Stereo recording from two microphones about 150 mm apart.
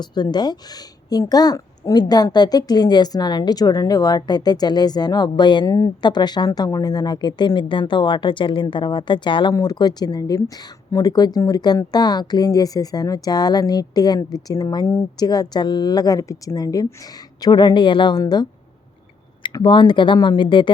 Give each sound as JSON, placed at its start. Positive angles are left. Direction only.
{"t": 0.0, "sound": "a woman's voice", "side_deg": 30}